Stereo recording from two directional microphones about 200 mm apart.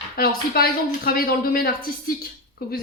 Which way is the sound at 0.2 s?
50° left (ahead or behind).